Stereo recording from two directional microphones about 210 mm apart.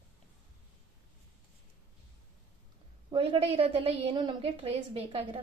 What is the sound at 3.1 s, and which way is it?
A woman's voice, 25° right (ahead or behind).